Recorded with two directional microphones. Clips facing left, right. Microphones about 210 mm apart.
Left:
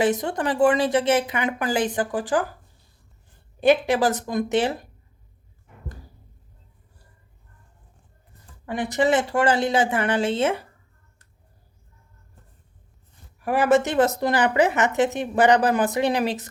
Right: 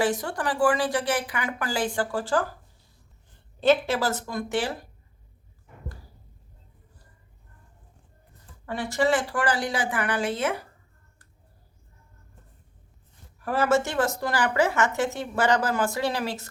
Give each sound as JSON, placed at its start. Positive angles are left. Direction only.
{"t": 0.0, "sound": "a woman's voice", "side_deg": 20}
{"t": 3.6, "sound": "a woman's voice", "side_deg": 15}
{"t": 8.6, "sound": "a woman's voice", "side_deg": 15}
{"t": 13.4, "sound": "a woman's voice", "side_deg": 15}